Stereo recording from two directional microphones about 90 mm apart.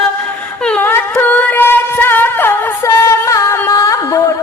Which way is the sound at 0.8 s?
25° left (ahead or behind).